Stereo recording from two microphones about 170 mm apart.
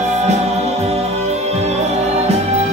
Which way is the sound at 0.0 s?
40° right (ahead or behind).